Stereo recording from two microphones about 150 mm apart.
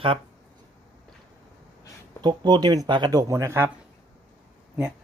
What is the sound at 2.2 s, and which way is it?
Speech, 30° right (ahead or behind).